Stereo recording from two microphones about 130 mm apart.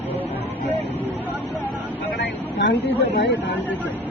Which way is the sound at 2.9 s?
55° left (ahead or behind).